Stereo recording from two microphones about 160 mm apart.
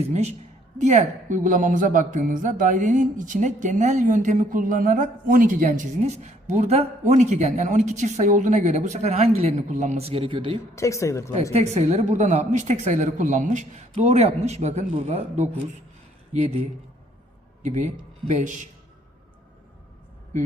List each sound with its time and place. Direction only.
0.8 s a woman's voice: 45° right (ahead or behind); by 10.6 s 30° right (ahead or behind)
10.8 s speech: 20° left (ahead or behind)
11.5 s a woman's voice: 45° right (ahead or behind)
17.6 s speech: 50° right (ahead or behind)